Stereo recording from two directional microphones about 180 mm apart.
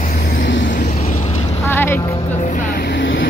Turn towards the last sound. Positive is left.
turn(degrees=80)